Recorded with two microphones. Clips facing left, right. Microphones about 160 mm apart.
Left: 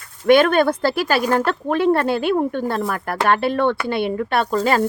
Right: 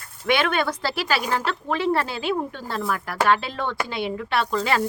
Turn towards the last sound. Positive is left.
turn(degrees=45)  # may be behind; listen again after turning